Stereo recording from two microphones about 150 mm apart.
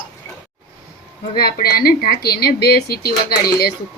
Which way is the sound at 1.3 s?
90° left.